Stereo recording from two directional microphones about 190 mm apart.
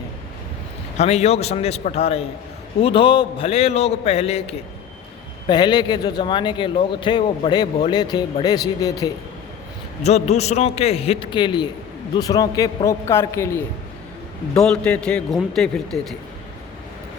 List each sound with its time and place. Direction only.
0.9 s a man's voice: 35° left (ahead or behind); by 9.1 s 20° left (ahead or behind)
10.0 s a man's voice: 35° left (ahead or behind); by 13.6 s 15° left (ahead or behind)
14.5 s speech: 5° left (ahead or behind)